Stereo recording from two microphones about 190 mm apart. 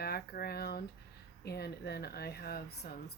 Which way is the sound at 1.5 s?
55° left (ahead or behind).